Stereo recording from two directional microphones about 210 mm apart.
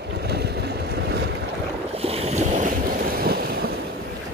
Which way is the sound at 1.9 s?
30° right (ahead or behind).